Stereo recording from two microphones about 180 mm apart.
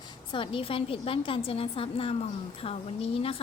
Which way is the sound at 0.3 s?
30° left (ahead or behind).